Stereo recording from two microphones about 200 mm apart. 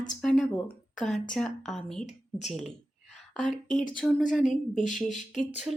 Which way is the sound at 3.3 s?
Centre (ahead or behind).